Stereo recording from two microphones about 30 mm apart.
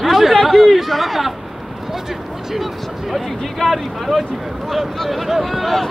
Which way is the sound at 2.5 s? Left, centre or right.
Centre.